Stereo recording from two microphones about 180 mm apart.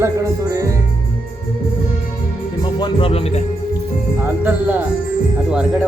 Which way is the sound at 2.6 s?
30° left (ahead or behind).